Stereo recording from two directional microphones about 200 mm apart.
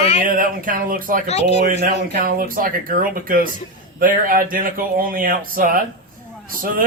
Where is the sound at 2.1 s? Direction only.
45° right (ahead or behind).